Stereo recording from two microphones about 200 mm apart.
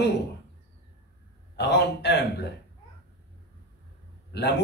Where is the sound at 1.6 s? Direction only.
55° left (ahead or behind).